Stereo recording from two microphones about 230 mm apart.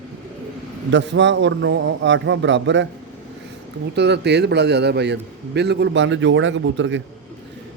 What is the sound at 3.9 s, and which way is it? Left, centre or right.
A man's voice, right.